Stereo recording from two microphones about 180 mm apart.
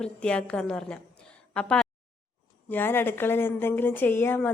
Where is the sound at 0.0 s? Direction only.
5° left (ahead or behind).